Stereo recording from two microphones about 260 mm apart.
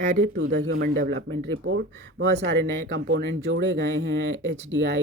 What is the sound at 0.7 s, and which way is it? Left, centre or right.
Speech, right.